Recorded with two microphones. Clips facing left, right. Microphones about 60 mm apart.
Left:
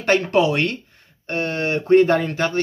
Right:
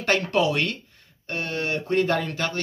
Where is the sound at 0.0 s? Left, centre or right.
Left.